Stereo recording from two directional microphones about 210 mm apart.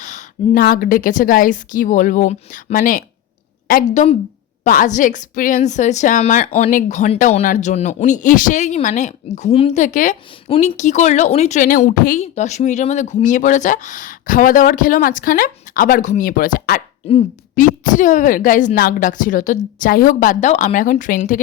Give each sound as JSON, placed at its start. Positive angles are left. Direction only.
{"t": 0.0, "sound": "a woman's voice", "side_deg": 35}